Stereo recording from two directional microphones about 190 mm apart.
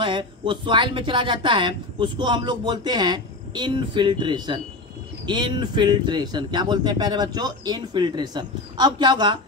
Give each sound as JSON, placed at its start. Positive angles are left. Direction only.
{"t": 0.0, "sound": "speech", "side_deg": -25}